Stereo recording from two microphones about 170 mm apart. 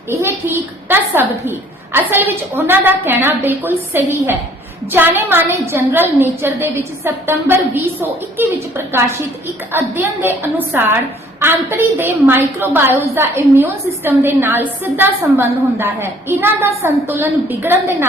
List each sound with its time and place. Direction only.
0.1 s a woman's voice: 15° right (ahead or behind)